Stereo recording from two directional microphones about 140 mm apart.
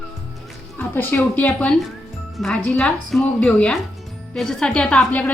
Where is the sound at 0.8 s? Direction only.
15° left (ahead or behind).